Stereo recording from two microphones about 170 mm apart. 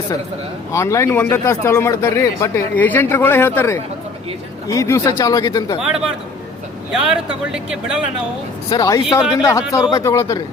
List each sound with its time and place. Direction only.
0.7 s speech: 15° left (ahead or behind)
6.9 s speech: 5° right (ahead or behind)
8.7 s speech: 20° left (ahead or behind)
9.0 s speech: 5° right (ahead or behind)
9.4 s speech: 20° left (ahead or behind)